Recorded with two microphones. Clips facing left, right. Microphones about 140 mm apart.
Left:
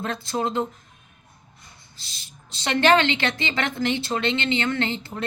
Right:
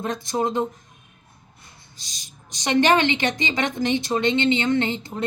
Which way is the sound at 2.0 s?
15° right (ahead or behind).